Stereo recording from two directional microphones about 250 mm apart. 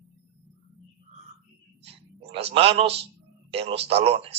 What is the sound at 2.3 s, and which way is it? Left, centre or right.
A man's voice, right.